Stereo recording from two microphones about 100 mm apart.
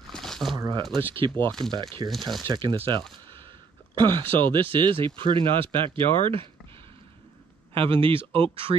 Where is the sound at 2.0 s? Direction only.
35° right (ahead or behind).